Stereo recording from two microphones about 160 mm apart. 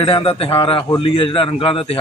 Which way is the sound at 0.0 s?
35° left (ahead or behind).